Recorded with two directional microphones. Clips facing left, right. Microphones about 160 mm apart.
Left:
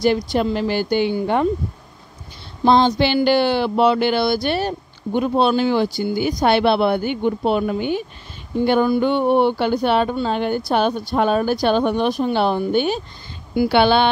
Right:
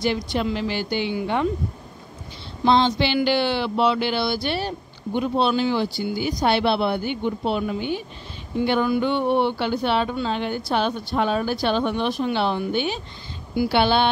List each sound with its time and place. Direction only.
0.0 s speech: 45° left (ahead or behind)
2.6 s speech: 45° left (ahead or behind)
8.6 s speech: 40° left (ahead or behind)
13.6 s a woman's voice: 65° left (ahead or behind)